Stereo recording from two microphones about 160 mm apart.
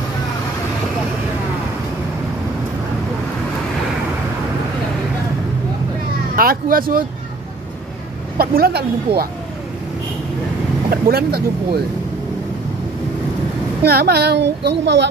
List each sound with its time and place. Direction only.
6.3 s speech: 65° right (ahead or behind)
8.4 s speech: 70° right (ahead or behind)
10.9 s speech: 75° right (ahead or behind)
13.8 s speech: 80° right